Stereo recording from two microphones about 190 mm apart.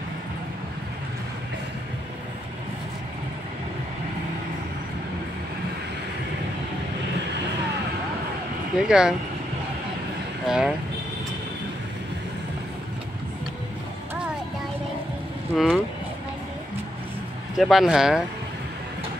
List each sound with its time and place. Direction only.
8.8 s speech: 5° right (ahead or behind)
10.4 s speech: 5° right (ahead or behind)
15.5 s speech: centre (ahead or behind)
17.6 s speech: centre (ahead or behind)